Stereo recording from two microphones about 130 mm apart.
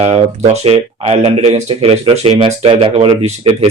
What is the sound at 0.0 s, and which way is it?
A man's voice, 55° right (ahead or behind).